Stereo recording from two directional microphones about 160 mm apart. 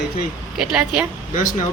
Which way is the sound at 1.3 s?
55° left (ahead or behind).